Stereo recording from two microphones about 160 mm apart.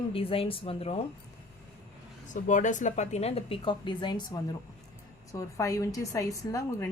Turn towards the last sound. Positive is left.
turn(degrees=20)  # may be behind; listen again after turning